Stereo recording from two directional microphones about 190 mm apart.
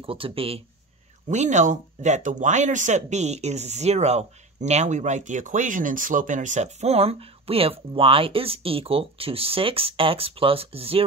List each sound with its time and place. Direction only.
0.0 s speech: 30° right (ahead or behind)